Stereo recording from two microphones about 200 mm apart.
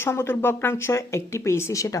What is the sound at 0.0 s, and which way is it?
A woman's voice, 10° left (ahead or behind).